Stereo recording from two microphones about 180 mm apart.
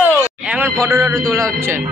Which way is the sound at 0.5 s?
10° right (ahead or behind).